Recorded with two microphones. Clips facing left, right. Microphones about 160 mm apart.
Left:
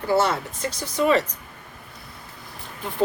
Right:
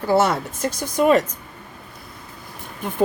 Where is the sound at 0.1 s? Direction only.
50° right (ahead or behind).